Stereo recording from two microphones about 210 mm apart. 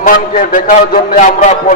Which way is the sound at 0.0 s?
40° left (ahead or behind).